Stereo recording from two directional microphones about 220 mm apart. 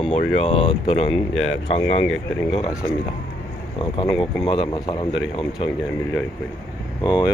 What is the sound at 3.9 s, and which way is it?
Speech, 20° left (ahead or behind).